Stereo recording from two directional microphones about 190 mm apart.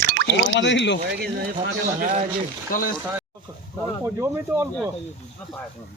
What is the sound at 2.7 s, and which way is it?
Speech, 50° left (ahead or behind).